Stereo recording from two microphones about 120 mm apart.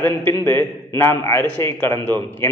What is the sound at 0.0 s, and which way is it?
A man's voice, 20° left (ahead or behind).